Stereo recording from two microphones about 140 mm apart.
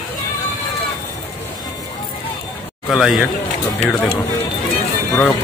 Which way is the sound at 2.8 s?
Centre (ahead or behind).